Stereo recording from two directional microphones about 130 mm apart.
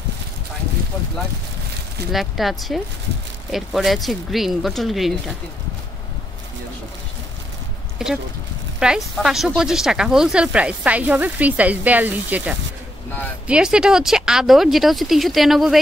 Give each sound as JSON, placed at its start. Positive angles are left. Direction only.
{"t": 2.1, "sound": "speech", "side_deg": 0}
{"t": 8.0, "sound": "speech", "side_deg": -5}